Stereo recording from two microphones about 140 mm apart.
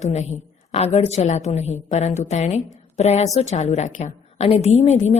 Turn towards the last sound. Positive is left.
turn(degrees=50)  # may be behind; listen again after turning